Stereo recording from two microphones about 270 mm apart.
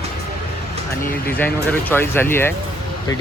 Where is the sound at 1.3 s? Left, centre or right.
Centre.